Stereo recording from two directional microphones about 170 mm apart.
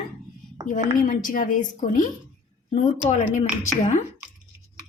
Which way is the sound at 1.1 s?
50° left (ahead or behind).